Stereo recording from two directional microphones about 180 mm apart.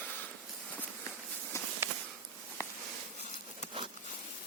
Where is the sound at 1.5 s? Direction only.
15° left (ahead or behind).